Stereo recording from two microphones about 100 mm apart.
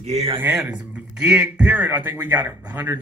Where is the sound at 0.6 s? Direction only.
10° right (ahead or behind).